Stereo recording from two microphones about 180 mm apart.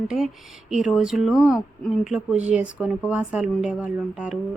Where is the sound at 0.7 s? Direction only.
5° right (ahead or behind).